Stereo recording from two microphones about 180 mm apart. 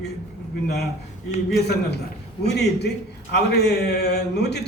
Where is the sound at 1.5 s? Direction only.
65° left (ahead or behind).